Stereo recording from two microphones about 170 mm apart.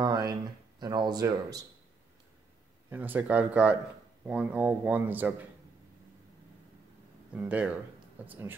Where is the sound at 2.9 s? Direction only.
10° right (ahead or behind).